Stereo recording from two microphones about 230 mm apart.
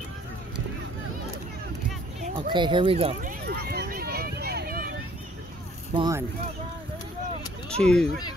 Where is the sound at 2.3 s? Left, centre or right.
Right.